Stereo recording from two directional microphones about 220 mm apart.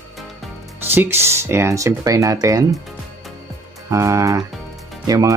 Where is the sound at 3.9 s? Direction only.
15° right (ahead or behind).